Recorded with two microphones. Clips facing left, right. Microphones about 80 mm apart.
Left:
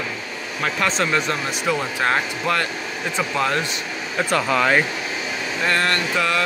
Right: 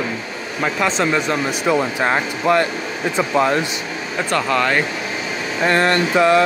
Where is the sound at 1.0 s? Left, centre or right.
Centre.